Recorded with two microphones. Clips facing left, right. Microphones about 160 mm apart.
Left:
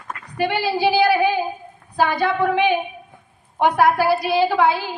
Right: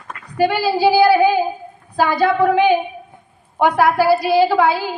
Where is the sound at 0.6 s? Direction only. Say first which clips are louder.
Right 4 dB; 35° right (ahead or behind).